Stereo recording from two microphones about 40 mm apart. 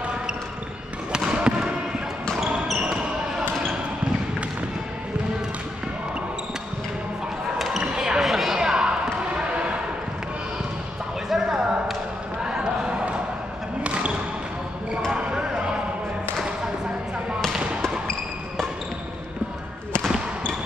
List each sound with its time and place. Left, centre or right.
1.1 s basketball bounce: right
2.8 s basketball bounce: right
7.5 s basketball bounce: centre
7.8 s basketball bounce: centre
11.2 s a sound: centre
12.4 s a sound: right
13.8 s basketball bounce: right
15.1 s basketball bounce: right